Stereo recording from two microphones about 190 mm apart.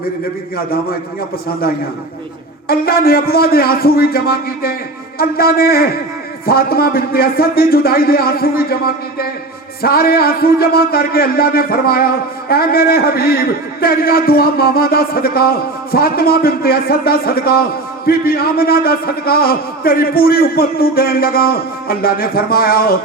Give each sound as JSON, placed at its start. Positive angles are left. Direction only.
{"t": 0.5, "sound": "speech", "side_deg": 55}
{"t": 2.6, "sound": "speech", "side_deg": 55}